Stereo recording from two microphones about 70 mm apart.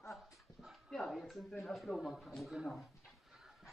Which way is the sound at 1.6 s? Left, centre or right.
Centre.